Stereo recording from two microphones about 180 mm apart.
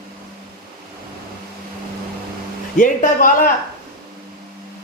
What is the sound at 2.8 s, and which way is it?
Speech, 45° left (ahead or behind).